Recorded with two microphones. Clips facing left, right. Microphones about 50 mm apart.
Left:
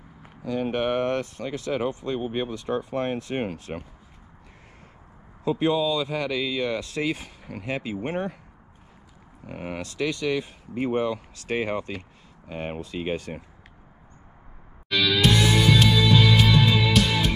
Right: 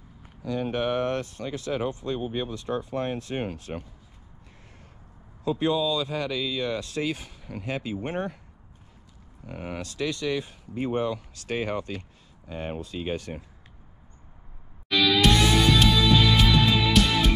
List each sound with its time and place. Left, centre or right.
0.4 s speech: left
3.5 s speech: left
5.4 s speech: left
9.5 s speech: left
9.9 s speech: left
14.9 s music: centre